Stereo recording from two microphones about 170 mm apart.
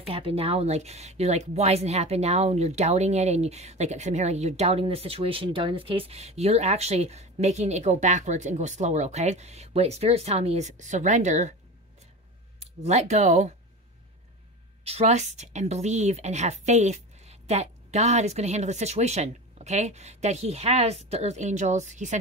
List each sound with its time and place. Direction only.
0.1 s speech: 35° right (ahead or behind)
12.5 s speech: 40° right (ahead or behind)
14.9 s a woman's voice: 40° right (ahead or behind)